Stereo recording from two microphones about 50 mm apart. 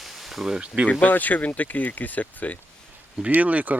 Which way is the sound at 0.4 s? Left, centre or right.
Centre.